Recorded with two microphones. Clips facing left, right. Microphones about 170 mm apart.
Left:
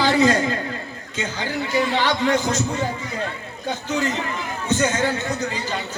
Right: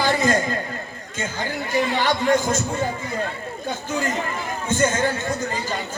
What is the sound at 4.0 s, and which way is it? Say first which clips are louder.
A man's voice: left 1 dB; 50° right (ahead or behind).